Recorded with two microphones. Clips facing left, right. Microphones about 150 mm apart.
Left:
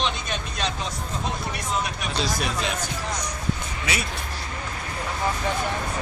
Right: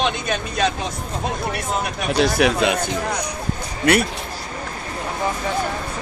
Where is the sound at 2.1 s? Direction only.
65° right (ahead or behind).